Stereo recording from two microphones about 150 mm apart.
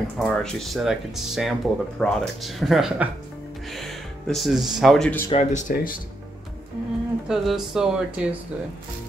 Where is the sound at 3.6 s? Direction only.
Centre (ahead or behind).